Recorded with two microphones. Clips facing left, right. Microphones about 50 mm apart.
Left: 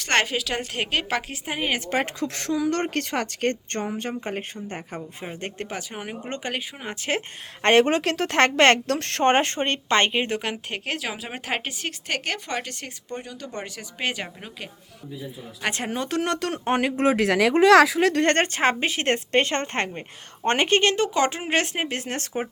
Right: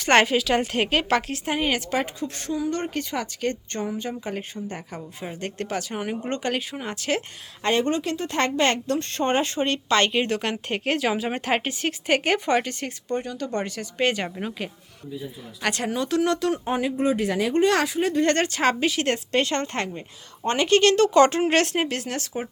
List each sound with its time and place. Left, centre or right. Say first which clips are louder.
0.0 s a woman's voice: right 4 dB; centre
2.1 s a woman's voice: left 2 dB; left
4.9 s a woman's voice: even; centre
5.9 s speech: right 4 dB; centre
6.9 s a woman's voice: even; left
7.6 s a woman's voice: left 4 dB; left
10.1 s speech: right 1 dB; centre
10.4 s a woman's voice: right 3 dB; centre
15.7 s a woman's voice: right 3 dB; left
18.2 s a woman's voice: left 1 dB; left
20.9 s speech: right 6 dB; centre
22.0 s a woman's voice: even; left